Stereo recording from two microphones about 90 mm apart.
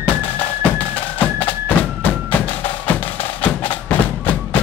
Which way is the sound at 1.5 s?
20° left (ahead or behind).